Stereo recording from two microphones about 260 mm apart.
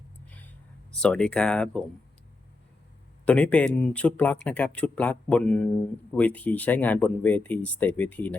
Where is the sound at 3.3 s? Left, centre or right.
Centre.